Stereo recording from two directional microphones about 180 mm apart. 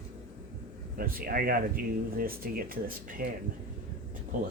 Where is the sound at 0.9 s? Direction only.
55° right (ahead or behind).